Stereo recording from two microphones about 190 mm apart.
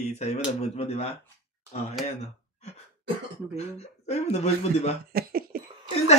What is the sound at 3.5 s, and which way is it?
Speech, 35° left (ahead or behind).